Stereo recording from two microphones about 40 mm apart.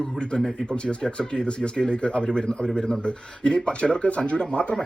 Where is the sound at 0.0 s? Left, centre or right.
Left.